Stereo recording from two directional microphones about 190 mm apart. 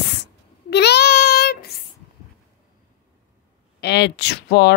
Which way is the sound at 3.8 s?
60° left (ahead or behind).